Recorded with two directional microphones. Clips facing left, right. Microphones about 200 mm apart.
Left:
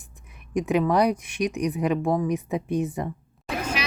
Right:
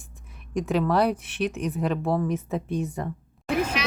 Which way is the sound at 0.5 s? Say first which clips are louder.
Left 2 dB; 15° left (ahead or behind).